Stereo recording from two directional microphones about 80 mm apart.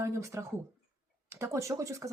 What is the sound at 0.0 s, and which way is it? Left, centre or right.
Speech, right.